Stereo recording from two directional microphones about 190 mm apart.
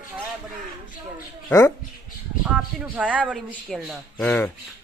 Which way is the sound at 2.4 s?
5° right (ahead or behind).